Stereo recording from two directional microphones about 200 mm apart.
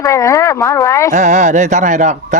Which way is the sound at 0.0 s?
15° left (ahead or behind).